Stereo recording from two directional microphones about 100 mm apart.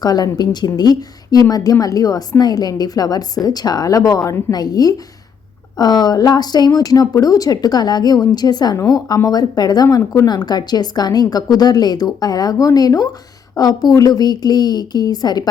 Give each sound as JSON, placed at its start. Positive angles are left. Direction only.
{"t": 0.0, "sound": "speech", "side_deg": 40}